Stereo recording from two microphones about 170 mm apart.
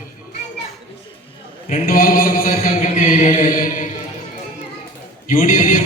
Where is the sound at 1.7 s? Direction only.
55° left (ahead or behind).